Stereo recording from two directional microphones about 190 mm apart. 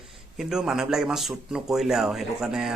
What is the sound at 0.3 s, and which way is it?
Speech, 5° right (ahead or behind).